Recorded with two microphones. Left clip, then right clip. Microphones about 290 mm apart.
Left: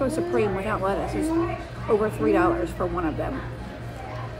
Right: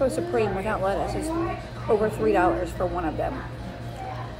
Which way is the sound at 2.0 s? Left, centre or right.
Centre.